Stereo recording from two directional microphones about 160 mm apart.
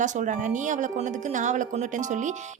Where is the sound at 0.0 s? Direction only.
50° right (ahead or behind).